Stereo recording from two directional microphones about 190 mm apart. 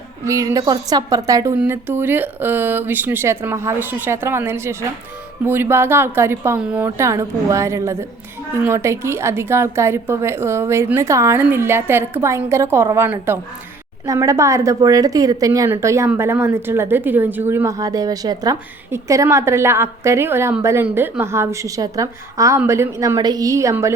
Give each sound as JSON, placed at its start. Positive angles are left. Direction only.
{"t": 0.3, "sound": "a woman's voice", "side_deg": -15}